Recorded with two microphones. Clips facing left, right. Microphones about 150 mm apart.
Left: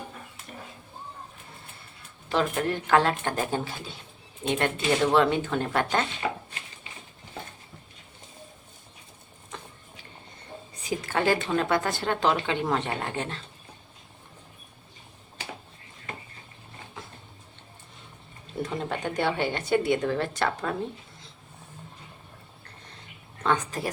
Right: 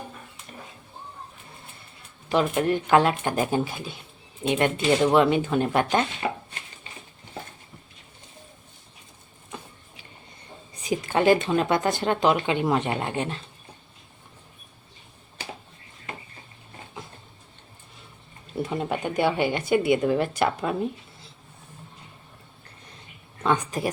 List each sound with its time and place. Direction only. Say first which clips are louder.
2.3 s speech: right 4 dB; 20° right (ahead or behind)
10.8 s speech: right 5 dB; 20° right (ahead or behind)
18.7 s speech: right 4 dB; 10° right (ahead or behind)
23.4 s speech: right 2 dB; 15° right (ahead or behind)